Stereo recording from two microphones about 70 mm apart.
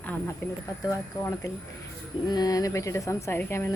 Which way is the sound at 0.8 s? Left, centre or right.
Left.